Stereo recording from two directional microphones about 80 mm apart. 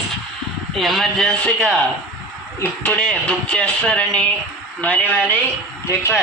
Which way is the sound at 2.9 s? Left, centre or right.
Centre.